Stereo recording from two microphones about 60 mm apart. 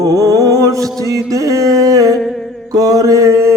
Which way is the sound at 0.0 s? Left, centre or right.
Right.